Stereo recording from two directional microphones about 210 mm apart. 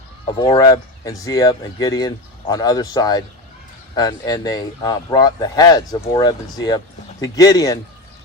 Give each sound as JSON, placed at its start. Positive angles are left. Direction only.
{"t": 0.3, "sound": "speech", "side_deg": 20}